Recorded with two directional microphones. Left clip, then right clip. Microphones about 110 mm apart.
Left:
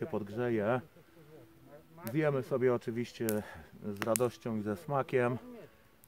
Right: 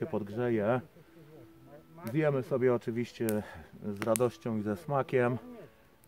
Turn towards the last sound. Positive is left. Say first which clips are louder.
# right 2 dB
turn(degrees=-5)  # may be behind; listen again after turning